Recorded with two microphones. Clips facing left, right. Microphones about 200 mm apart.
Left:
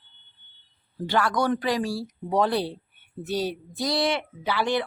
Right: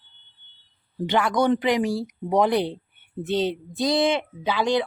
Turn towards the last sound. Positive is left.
turn(degrees=-15)  # may be behind; listen again after turning